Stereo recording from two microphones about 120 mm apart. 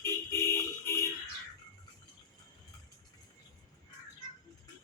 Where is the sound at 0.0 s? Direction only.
25° left (ahead or behind).